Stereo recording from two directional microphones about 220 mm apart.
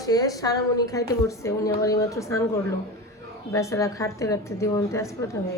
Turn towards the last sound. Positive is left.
turn(degrees=15)  # may be behind; listen again after turning